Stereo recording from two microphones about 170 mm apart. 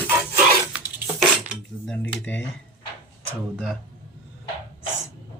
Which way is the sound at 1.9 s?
10° left (ahead or behind).